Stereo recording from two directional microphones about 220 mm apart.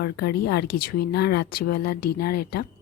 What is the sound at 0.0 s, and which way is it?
Speech, 45° left (ahead or behind).